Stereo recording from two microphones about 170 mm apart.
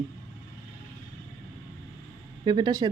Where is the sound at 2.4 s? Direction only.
25° right (ahead or behind).